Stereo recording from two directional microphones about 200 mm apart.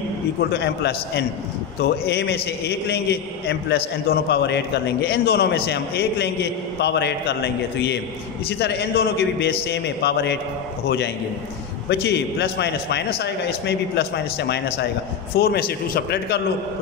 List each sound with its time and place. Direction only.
0.5 s a man's voice: 60° left (ahead or behind)
11.9 s a man's voice: 55° left (ahead or behind)